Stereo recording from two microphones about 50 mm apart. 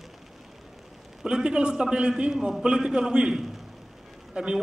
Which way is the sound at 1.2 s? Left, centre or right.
Centre.